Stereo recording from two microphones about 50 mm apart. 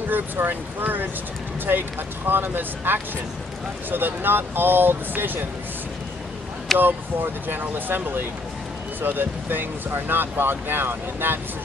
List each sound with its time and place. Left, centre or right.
0.1 s speech: right
6.8 s speech: right